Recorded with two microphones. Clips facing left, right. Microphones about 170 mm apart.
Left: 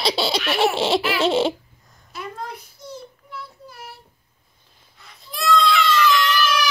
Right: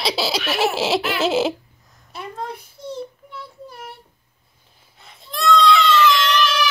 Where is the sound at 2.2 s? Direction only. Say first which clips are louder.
Right 2 dB; 25° right (ahead or behind).